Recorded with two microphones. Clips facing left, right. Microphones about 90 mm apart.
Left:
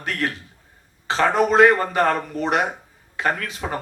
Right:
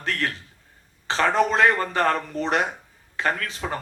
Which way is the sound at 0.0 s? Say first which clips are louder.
Left 2 dB; 35° left (ahead or behind).